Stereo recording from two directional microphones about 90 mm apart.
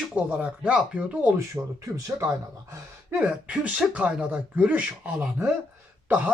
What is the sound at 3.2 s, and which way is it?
Speech, 10° right (ahead or behind).